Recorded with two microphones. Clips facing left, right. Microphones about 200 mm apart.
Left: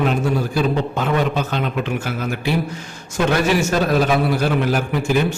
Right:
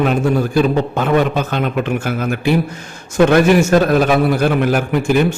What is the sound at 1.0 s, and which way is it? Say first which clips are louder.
A man's voice: right 5 dB; 55° right (ahead or behind).